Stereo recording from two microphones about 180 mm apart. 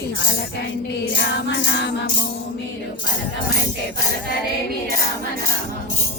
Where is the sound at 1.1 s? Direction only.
75° left (ahead or behind).